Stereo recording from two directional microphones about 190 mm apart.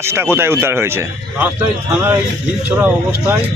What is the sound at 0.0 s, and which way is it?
Speech, 15° right (ahead or behind).